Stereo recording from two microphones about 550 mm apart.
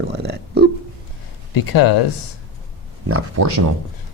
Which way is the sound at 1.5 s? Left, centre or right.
Left.